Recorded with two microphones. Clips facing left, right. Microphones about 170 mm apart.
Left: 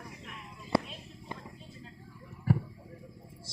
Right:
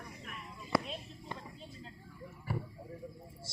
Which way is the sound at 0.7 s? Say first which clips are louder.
Left 3 dB; 30° left (ahead or behind).